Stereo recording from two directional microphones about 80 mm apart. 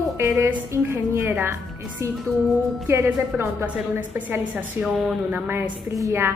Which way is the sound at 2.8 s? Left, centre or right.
Right.